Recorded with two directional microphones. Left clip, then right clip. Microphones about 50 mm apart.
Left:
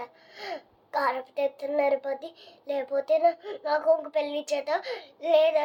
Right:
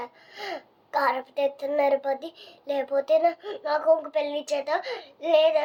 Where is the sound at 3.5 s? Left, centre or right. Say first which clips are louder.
Right 2 dB; centre.